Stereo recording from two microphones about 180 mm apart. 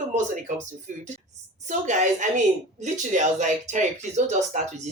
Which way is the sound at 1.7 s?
40° right (ahead or behind).